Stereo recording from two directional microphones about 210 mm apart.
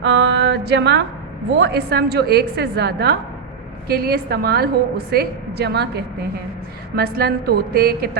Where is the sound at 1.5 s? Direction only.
50° right (ahead or behind).